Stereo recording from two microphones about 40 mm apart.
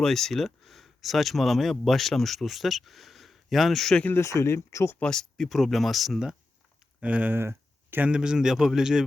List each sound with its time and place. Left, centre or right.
0.0 s speech: centre
4.1 s speech: left
5.0 s speech: centre
5.5 s speech: centre
7.0 s speech: right
7.3 s a sound: right
8.1 s speech: centre